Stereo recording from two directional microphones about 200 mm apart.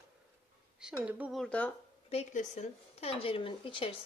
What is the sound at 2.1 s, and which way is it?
Speech, 35° left (ahead or behind).